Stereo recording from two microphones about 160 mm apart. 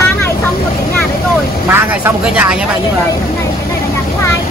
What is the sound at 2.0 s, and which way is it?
Speech, 10° right (ahead or behind).